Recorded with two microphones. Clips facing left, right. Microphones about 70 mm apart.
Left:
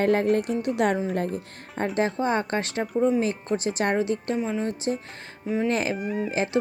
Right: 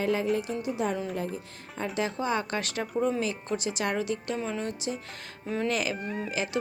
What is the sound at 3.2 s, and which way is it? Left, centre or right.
Speech, left.